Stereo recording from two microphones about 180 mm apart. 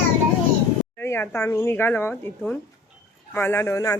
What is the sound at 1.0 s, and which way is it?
Speech, 10° left (ahead or behind).